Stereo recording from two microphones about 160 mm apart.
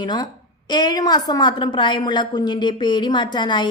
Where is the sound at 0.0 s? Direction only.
25° left (ahead or behind).